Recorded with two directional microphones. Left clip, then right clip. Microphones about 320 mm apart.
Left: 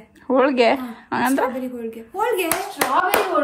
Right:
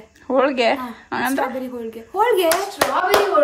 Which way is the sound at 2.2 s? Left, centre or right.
Centre.